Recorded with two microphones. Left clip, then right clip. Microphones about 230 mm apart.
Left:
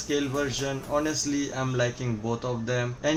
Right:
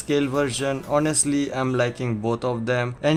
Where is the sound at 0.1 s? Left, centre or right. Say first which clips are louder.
Right 6 dB; right.